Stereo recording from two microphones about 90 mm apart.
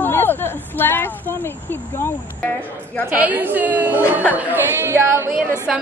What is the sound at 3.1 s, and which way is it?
A woman's voice, 20° right (ahead or behind).